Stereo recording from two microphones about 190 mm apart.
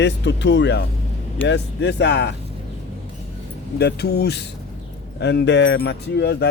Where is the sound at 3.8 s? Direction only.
60° left (ahead or behind).